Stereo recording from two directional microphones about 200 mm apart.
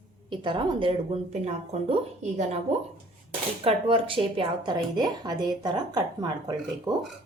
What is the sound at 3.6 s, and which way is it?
A woman's voice, 25° right (ahead or behind).